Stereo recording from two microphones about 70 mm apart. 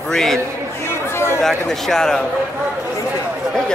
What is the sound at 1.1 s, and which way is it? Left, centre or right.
Chatter, left.